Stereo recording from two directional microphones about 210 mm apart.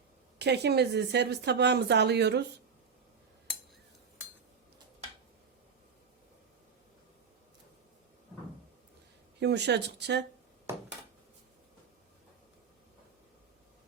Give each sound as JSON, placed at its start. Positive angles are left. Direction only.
{"t": 0.3, "sound": "a woman's voice", "side_deg": -55}
{"t": 9.4, "sound": "a woman's voice", "side_deg": -55}